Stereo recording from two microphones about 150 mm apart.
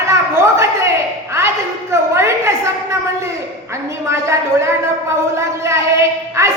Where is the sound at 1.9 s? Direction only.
20° right (ahead or behind).